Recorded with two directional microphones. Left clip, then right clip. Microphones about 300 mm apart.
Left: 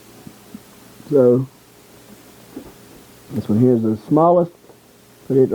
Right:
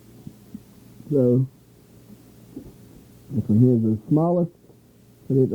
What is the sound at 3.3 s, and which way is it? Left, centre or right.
Speech, centre.